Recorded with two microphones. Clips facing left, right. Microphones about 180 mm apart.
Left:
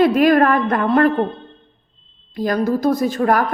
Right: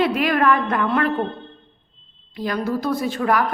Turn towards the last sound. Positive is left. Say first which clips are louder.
# left 4 dB
turn(degrees=45)  # may be behind; listen again after turning